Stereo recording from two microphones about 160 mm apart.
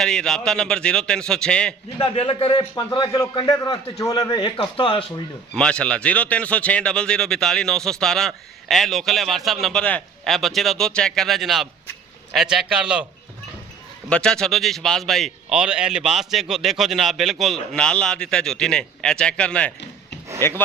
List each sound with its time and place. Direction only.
0.0 s a man's voice: 5° left (ahead or behind)
2.0 s a man's voice: 30° left (ahead or behind)
5.5 s a man's voice: 5° left (ahead or behind)
14.1 s a man's voice: 5° left (ahead or behind)